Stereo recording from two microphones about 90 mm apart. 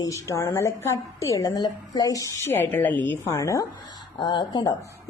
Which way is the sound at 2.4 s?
25° left (ahead or behind).